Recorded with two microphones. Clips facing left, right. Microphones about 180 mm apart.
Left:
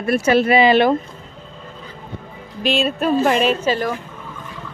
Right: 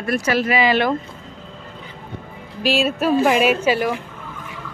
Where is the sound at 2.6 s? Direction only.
5° right (ahead or behind).